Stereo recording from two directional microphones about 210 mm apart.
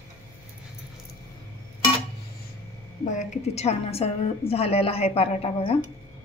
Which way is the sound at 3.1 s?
35° left (ahead or behind).